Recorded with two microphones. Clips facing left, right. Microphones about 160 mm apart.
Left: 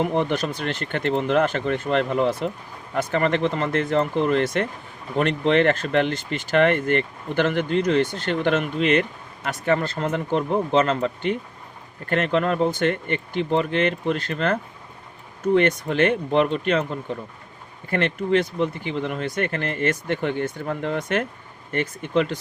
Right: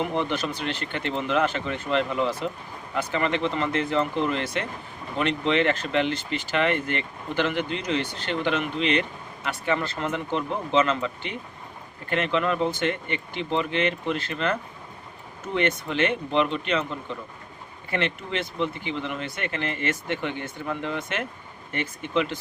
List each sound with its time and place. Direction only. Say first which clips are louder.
0.0 s speech: left 4 dB; 50° left (ahead or behind)